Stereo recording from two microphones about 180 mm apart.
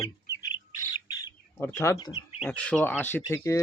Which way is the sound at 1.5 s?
15° left (ahead or behind).